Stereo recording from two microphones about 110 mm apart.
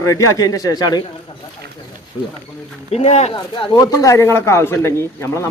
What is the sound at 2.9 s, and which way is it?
Speech, 80° left.